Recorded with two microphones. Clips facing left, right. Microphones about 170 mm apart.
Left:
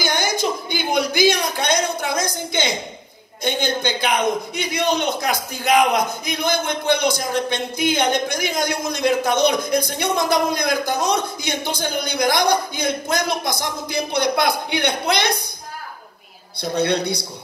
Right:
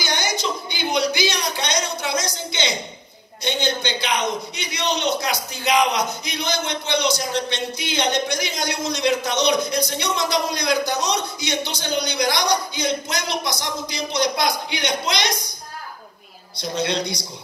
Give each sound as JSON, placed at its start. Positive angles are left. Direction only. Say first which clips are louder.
{"t": 0.0, "sound": "a sound", "louder": "left 4 dB", "side_deg": 50}
{"t": 3.4, "sound": "a man's voice", "louder": "left 2 dB", "side_deg": 50}
{"t": 16.6, "sound": "a woman's voice", "louder": "left 4 dB", "side_deg": 55}